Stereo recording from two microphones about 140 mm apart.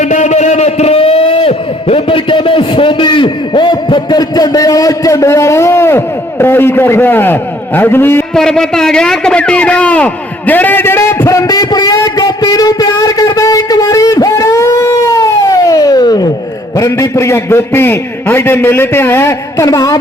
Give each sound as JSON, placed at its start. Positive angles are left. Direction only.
{"t": 0.0, "sound": "a man's voice", "side_deg": 60}
{"t": 8.4, "sound": "a sound", "side_deg": 5}
{"t": 16.7, "sound": "a man's voice", "side_deg": 25}